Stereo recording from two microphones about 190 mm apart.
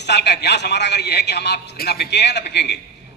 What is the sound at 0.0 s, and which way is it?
A man's voice, 60° left (ahead or behind).